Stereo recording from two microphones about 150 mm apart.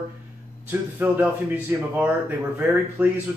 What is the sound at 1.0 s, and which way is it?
Speech, 10° right (ahead or behind).